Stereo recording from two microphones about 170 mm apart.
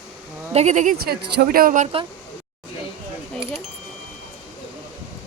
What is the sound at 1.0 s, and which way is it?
Speech, 60° right (ahead or behind).